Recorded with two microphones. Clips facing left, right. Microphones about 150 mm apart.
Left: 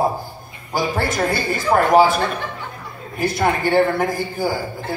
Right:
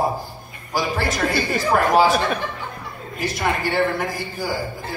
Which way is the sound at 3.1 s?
50° left (ahead or behind).